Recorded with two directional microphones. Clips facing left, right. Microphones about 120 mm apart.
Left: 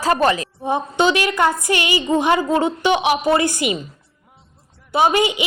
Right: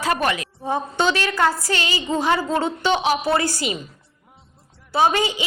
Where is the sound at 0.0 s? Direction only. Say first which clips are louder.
Left 5 dB; 35° left (ahead or behind).